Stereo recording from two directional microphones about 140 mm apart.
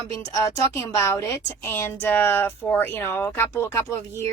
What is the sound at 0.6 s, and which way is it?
A woman's voice, 20° left (ahead or behind).